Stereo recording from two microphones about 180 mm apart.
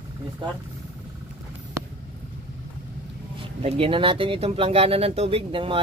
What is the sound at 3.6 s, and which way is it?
Speech, 35° right (ahead or behind).